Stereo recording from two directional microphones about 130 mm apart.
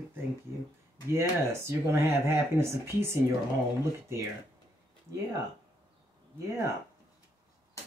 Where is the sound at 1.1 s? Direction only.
20° right (ahead or behind).